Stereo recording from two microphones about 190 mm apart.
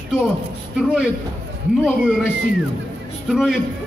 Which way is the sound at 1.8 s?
5° right (ahead or behind).